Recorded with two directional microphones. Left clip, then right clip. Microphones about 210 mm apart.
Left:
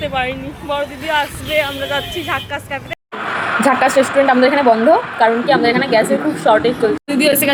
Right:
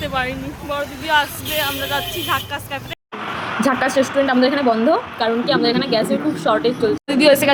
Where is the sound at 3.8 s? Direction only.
20° right (ahead or behind).